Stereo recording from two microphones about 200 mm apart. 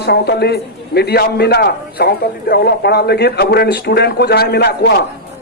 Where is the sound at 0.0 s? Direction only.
55° left (ahead or behind).